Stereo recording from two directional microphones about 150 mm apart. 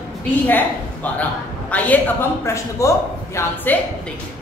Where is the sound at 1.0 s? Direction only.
10° left (ahead or behind).